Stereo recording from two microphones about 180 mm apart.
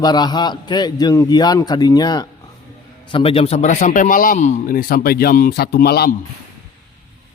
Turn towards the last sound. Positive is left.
turn(degrees=60)  # may be behind; listen again after turning